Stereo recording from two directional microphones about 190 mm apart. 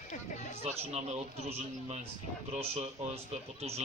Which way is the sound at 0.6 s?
35° right (ahead or behind).